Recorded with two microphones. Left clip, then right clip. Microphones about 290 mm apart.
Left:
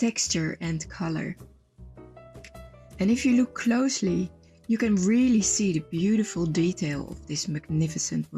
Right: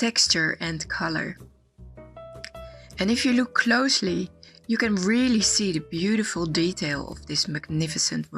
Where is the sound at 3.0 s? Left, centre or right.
Right.